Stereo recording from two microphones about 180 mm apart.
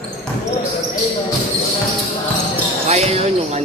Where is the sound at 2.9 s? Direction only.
35° right (ahead or behind).